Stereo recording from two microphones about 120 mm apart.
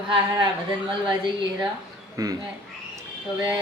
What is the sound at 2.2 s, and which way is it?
Speech, 30° right (ahead or behind).